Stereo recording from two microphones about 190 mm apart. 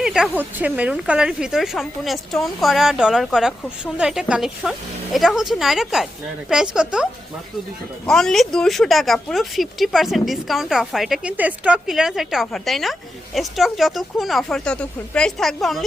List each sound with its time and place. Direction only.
0.0 s speech: 5° right (ahead or behind)